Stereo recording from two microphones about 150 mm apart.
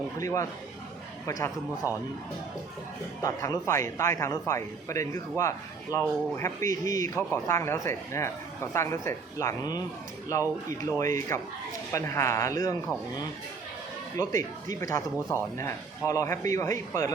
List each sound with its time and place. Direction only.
0.2 s speech: 20° left (ahead or behind)
3.2 s speech: 20° left (ahead or behind)
10.9 s speech: 20° left (ahead or behind)
14.2 s speech: 25° left (ahead or behind)